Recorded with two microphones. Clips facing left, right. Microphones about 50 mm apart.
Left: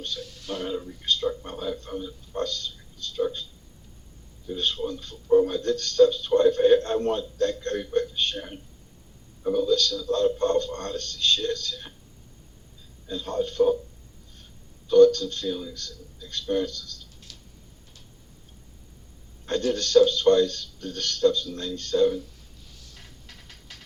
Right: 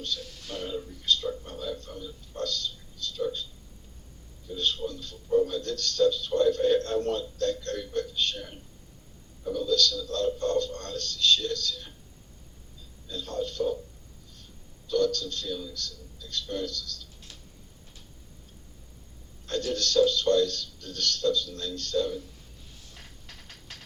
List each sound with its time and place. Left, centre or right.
0.0 s speech: left
4.4 s speech: left
13.1 s speech: left
14.8 s speech: left
17.3 s a sound: right
19.5 s speech: left